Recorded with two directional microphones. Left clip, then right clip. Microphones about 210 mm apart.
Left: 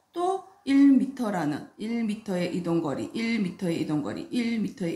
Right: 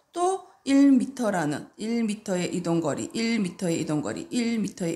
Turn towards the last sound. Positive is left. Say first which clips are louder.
# right 2 dB
turn(degrees=-40)  # may be behind; listen again after turning